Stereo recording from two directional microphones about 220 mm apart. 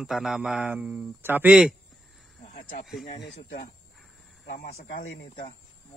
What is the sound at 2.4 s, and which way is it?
Snake, 35° left (ahead or behind).